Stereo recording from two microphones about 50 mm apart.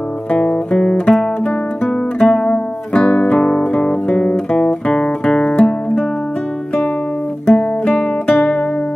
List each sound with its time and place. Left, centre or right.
0.3 s guitar: left
2.1 s music: centre
4.1 s guitar: left
7.4 s music: left